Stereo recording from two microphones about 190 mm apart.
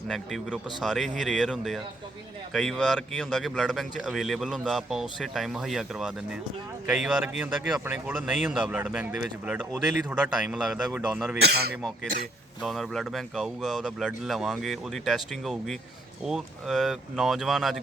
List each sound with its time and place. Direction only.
0.1 s a man's voice: centre (ahead or behind)
11.3 s speech: 55° right (ahead or behind)
12.6 s a man's voice: centre (ahead or behind)